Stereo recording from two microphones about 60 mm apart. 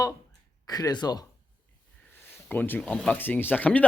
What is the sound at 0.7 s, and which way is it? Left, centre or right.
Speech, left.